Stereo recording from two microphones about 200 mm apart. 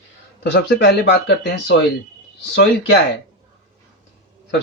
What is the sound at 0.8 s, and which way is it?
Speech, 60° left (ahead or behind).